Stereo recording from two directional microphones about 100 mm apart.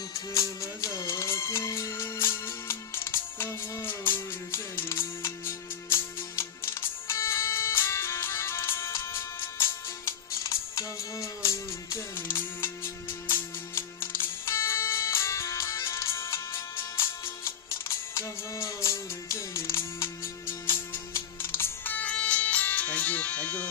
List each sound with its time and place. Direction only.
0.1 s music: 35° left (ahead or behind); by 23.6 s 15° left (ahead or behind)